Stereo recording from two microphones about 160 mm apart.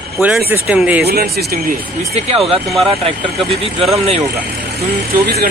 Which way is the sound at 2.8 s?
35° right (ahead or behind).